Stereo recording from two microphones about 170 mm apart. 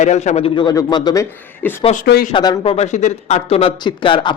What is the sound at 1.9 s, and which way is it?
Speech, 60° left (ahead or behind).